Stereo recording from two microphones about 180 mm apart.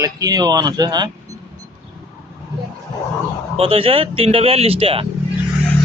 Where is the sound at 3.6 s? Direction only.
30° right (ahead or behind).